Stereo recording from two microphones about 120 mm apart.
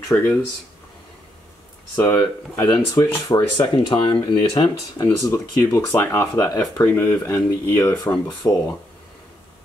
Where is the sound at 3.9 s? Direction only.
45° left (ahead or behind).